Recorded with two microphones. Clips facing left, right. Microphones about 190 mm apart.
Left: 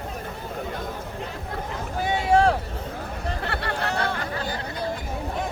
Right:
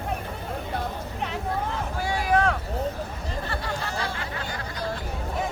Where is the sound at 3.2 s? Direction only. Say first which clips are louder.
Left 4 dB; 65° left (ahead or behind).